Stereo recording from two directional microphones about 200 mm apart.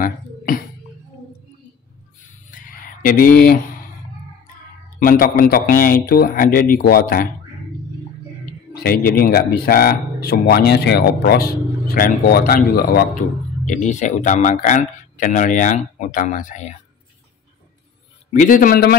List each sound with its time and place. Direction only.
0.0 s a sound: 45° left (ahead or behind)
2.5 s a sound: 45° left (ahead or behind)
4.8 s speech: 45° left (ahead or behind)
8.7 s speech: 50° left (ahead or behind)
13.7 s speech: 40° left (ahead or behind)
18.3 s speech: 40° left (ahead or behind)